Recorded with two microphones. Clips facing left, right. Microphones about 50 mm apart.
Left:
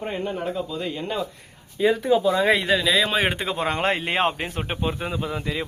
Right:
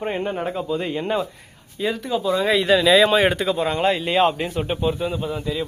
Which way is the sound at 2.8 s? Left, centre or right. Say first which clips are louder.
Right 6 dB; centre.